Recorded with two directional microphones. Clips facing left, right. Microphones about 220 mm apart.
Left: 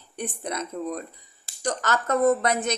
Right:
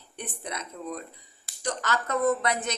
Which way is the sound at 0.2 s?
45° left (ahead or behind).